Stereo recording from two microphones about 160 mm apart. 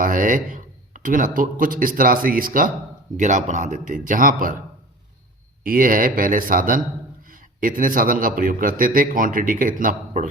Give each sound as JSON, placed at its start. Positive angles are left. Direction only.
{"t": 0.0, "sound": "a man's voice", "side_deg": -55}
{"t": 5.6, "sound": "a man's voice", "side_deg": -60}